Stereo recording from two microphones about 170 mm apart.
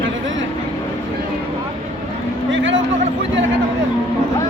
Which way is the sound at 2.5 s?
90° right.